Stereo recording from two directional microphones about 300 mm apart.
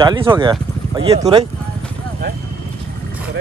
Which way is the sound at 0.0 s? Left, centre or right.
Centre.